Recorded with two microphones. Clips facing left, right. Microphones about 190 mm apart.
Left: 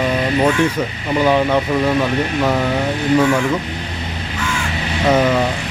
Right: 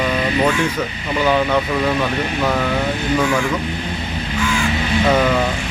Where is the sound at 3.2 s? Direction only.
5° left (ahead or behind).